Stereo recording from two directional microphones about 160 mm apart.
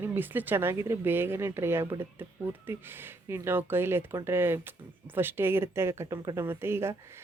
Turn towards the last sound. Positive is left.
turn(degrees=-15)  # may be behind; listen again after turning